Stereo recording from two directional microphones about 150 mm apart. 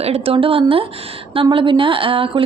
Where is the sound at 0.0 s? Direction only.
40° right (ahead or behind).